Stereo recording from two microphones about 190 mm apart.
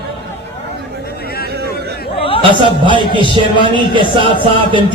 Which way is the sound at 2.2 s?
30° left (ahead or behind).